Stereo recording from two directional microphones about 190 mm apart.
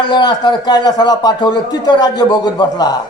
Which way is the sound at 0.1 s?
20° left (ahead or behind).